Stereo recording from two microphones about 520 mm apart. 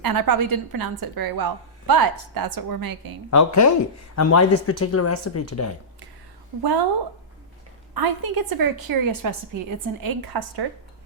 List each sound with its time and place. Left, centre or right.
0.0 s speech: right
3.2 s speech: left
6.6 s speech: right
7.9 s speech: right